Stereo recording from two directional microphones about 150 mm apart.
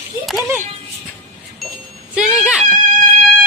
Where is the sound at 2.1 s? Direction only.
5° right (ahead or behind).